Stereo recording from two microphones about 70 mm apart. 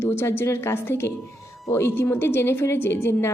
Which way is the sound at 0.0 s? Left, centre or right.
Left.